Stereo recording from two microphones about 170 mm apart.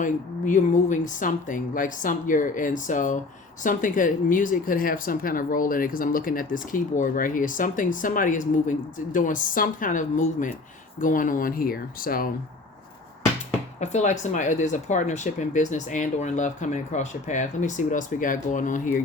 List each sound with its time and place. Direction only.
0.0 s speech: 50° left (ahead or behind)
13.7 s speech: 45° left (ahead or behind)